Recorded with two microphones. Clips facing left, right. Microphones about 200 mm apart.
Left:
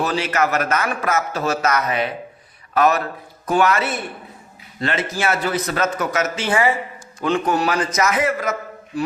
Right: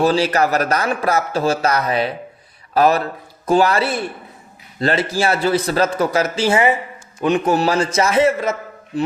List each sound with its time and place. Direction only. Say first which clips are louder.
0.0 s a man's voice: right 5 dB; 35° right (ahead or behind)